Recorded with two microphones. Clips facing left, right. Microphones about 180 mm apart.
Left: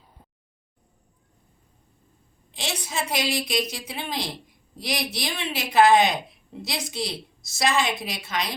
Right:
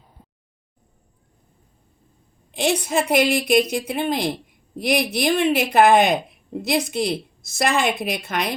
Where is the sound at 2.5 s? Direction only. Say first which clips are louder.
Right 11 dB; 55° right (ahead or behind).